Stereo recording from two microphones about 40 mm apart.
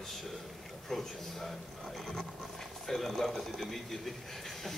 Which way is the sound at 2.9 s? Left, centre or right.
Centre.